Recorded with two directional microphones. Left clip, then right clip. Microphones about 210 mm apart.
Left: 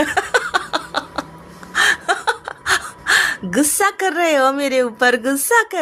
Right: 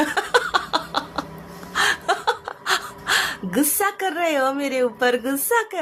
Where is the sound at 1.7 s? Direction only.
10° left (ahead or behind).